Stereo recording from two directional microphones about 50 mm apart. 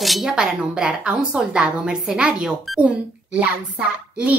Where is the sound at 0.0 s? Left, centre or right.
Centre.